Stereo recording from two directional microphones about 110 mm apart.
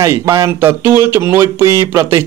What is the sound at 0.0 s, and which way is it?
Speech, 25° right (ahead or behind).